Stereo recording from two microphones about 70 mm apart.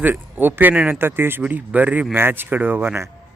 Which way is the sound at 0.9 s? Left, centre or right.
Right.